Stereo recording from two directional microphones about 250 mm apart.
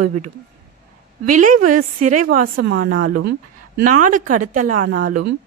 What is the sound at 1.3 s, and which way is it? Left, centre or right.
A woman's voice, right.